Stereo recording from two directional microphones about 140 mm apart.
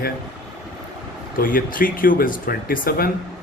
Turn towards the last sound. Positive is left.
turn(degrees=90)